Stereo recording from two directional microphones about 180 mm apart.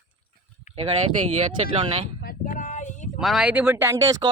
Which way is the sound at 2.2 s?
50° left (ahead or behind).